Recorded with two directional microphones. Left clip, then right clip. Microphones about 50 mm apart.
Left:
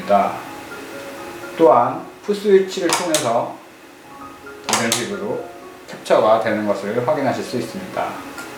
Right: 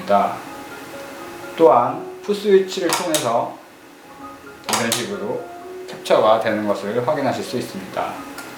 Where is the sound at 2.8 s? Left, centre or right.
Centre.